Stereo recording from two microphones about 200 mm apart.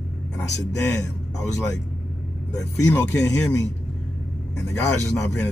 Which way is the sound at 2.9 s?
5° left (ahead or behind).